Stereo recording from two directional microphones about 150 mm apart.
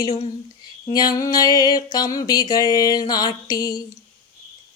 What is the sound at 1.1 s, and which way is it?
Child singing, 25° left (ahead or behind).